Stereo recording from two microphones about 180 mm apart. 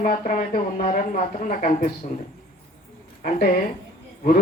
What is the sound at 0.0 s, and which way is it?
Speech, 50° left (ahead or behind).